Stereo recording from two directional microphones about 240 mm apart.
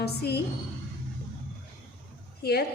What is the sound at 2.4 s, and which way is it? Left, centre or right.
Speech, left.